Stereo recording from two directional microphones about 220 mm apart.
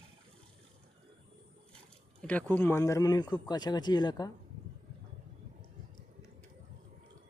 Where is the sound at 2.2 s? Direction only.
5° left (ahead or behind).